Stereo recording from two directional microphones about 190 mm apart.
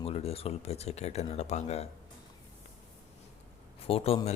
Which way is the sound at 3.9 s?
30° left (ahead or behind).